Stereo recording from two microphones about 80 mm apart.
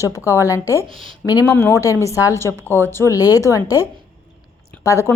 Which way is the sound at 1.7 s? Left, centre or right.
Left.